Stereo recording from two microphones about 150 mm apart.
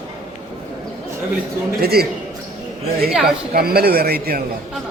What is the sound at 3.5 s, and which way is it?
Speech, 90° right.